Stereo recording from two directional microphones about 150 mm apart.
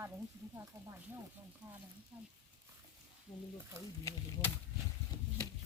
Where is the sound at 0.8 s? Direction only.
20° right (ahead or behind).